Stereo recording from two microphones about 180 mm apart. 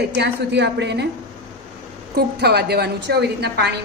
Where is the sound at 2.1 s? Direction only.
65° right (ahead or behind).